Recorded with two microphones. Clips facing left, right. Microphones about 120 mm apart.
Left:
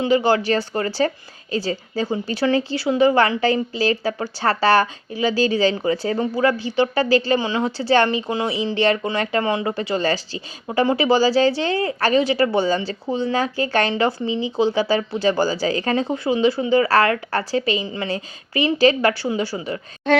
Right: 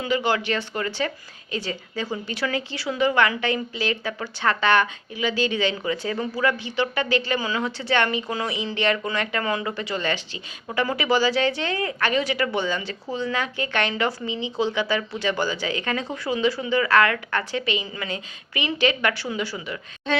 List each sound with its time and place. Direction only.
0.0 s a woman's voice: 30° left (ahead or behind)